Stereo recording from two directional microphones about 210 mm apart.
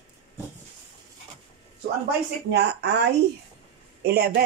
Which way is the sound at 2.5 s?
55° right (ahead or behind).